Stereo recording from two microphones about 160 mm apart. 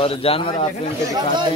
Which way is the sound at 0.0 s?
35° left (ahead or behind).